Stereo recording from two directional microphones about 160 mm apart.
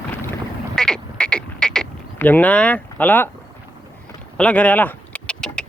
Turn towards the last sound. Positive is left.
turn(degrees=5)  # may be behind; listen again after turning